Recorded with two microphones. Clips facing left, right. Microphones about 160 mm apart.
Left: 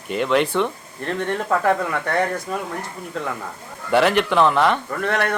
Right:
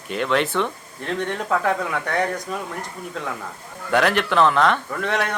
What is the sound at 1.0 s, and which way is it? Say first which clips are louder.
Speech: left 2 dB; centre (ahead or behind).